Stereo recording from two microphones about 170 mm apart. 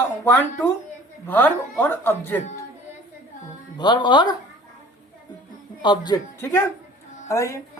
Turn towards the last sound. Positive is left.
turn(degrees=15)  # may be behind; listen again after turning